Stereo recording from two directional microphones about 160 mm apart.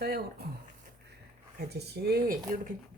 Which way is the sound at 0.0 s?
80° right.